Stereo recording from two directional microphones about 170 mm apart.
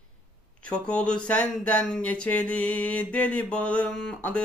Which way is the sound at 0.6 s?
5° left (ahead or behind).